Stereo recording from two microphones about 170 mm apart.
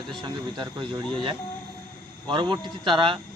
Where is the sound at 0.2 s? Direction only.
25° right (ahead or behind).